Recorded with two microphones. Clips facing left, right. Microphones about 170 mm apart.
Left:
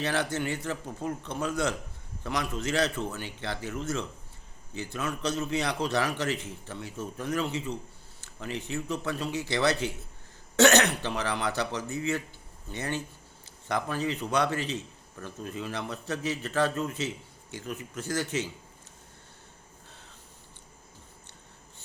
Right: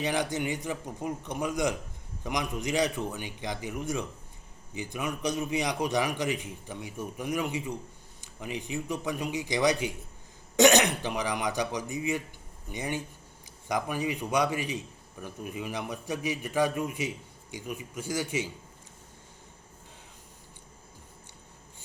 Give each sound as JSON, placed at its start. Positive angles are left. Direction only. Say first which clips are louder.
{"t": 0.0, "sound": "a man's voice", "louder": "even", "side_deg": -15}